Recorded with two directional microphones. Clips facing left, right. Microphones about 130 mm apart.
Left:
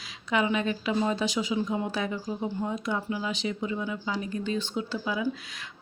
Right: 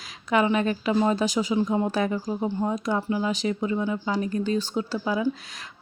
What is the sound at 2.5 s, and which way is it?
Speech, 35° right (ahead or behind).